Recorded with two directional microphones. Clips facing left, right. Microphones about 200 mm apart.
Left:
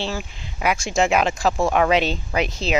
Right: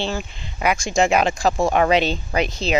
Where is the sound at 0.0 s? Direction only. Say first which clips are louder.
Right 2 dB; 5° left (ahead or behind).